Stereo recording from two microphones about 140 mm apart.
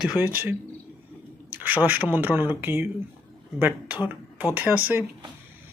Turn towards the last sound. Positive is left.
turn(degrees=-10)  # may be behind; listen again after turning